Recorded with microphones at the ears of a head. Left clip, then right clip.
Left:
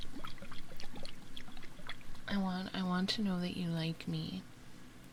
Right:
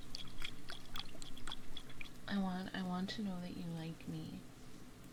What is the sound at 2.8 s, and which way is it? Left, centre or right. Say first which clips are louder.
Speech: left 7 dB; left.